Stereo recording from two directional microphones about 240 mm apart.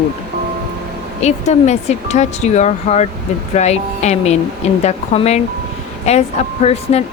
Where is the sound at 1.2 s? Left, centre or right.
Left.